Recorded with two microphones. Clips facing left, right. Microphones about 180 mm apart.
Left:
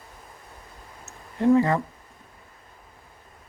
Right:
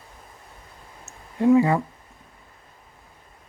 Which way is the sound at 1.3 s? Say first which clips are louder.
Right 2 dB; 10° right (ahead or behind).